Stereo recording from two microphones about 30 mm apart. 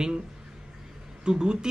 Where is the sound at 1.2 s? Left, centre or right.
Right.